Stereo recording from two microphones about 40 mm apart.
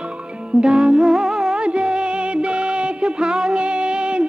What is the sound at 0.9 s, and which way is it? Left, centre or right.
Humming, centre.